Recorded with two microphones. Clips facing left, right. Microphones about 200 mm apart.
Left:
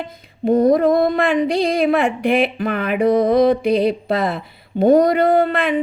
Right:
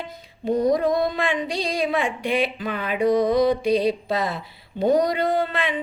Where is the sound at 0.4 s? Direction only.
55° left (ahead or behind).